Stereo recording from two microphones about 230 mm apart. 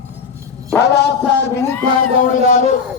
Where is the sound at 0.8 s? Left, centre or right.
Left.